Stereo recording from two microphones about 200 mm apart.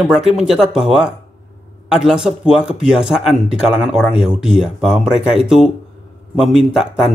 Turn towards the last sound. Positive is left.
turn(degrees=0)  # may be behind; listen again after turning